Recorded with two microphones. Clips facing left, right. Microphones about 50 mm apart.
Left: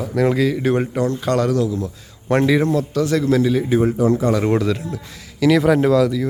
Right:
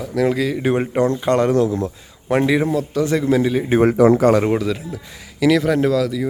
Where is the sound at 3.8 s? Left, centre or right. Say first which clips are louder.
Right 4 dB; right.